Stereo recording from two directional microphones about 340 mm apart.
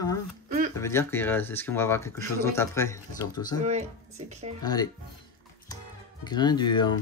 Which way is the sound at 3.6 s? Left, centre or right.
Centre.